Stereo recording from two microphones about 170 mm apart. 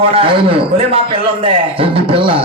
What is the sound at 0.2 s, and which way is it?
Speech, 35° right (ahead or behind).